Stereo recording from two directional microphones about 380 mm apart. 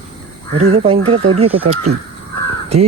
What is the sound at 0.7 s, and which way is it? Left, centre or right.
Speech, centre.